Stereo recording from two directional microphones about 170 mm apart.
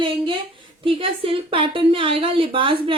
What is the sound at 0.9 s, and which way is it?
A woman's voice, 30° right (ahead or behind).